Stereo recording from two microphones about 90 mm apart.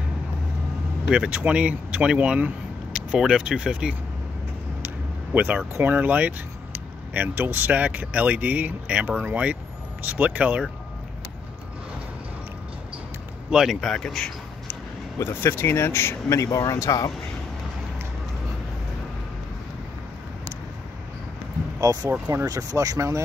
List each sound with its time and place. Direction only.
1.1 s speech: 15° right (ahead or behind)
5.3 s speech: 15° right (ahead or behind)
13.5 s speech: 5° right (ahead or behind)
15.1 s speech: 30° left (ahead or behind)
21.7 s speech: 40° right (ahead or behind)